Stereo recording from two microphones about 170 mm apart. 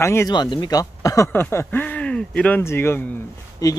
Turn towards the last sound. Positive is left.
turn(degrees=20)  # may be behind; listen again after turning